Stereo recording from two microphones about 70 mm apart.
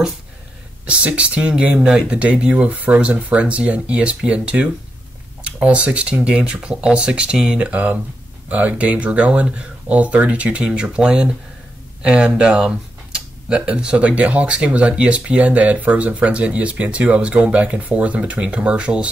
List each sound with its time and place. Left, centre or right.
0.8 s speech: centre